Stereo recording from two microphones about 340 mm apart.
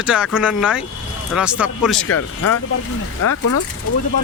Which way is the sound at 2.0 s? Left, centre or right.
Left.